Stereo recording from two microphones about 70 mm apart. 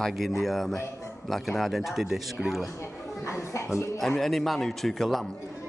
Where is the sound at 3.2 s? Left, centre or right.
Left.